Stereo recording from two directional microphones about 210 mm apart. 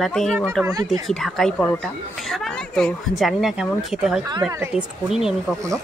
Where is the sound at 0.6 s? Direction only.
15° right (ahead or behind).